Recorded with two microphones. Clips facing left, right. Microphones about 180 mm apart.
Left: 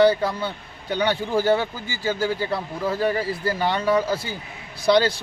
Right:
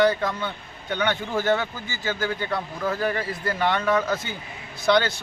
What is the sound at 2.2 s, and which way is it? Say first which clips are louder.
A man's voice: left 1 dB; 30° left (ahead or behind).